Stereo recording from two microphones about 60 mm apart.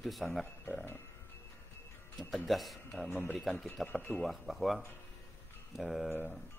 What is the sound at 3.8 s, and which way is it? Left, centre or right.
Speech, left.